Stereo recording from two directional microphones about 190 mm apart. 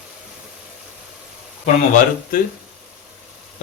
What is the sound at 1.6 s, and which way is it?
Speech, 40° left (ahead or behind).